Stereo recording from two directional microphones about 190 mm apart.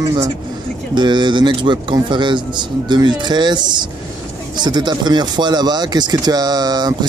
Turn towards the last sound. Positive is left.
turn(degrees=-20)  # may be behind; listen again after turning